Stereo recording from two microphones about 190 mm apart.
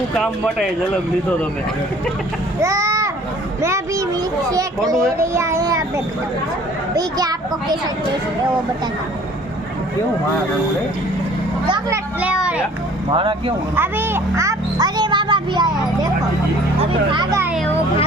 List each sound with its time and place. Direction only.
2.6 s a child's voice: 15° right (ahead or behind)
3.6 s a sound: 15° right (ahead or behind)
6.9 s speech: 20° right (ahead or behind)
12.2 s a sound: 5° right (ahead or behind)
13.1 s speech: 25° right (ahead or behind)
13.7 s speech: 10° right (ahead or behind)
17.1 s speech: 25° right (ahead or behind)